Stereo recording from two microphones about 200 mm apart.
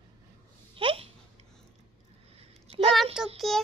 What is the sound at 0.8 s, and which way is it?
Babbling, 25° right (ahead or behind).